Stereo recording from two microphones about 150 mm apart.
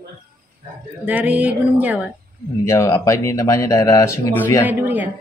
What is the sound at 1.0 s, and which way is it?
A woman's voice, 10° right (ahead or behind).